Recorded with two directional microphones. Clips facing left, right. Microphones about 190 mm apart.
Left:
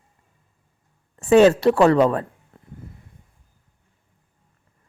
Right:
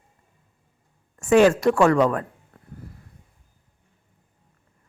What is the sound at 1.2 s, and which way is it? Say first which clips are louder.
Speech: left 3 dB; 35° left (ahead or behind).